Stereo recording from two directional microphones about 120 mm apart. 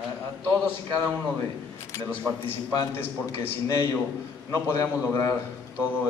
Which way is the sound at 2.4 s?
20° left (ahead or behind).